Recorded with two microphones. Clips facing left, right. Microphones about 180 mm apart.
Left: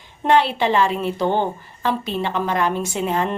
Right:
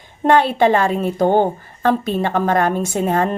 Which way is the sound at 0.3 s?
50° right (ahead or behind).